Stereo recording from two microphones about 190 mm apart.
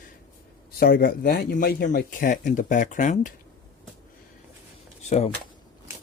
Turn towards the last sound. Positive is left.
turn(degrees=35)  # may be behind; listen again after turning